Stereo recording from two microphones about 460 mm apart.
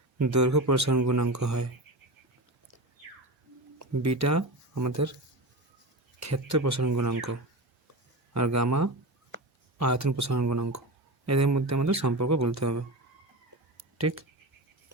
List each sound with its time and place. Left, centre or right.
0.2 s a man's voice: right
3.8 s speech: right
6.1 s a man's voice: right
13.7 s a sound: right